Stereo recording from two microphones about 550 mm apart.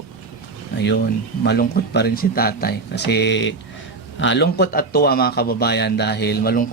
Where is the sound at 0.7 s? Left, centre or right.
Centre.